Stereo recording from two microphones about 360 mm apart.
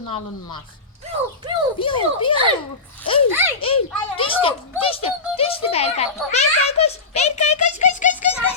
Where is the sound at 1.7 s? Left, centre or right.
Centre.